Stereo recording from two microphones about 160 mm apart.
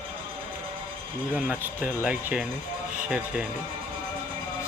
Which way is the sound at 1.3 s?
10° right (ahead or behind).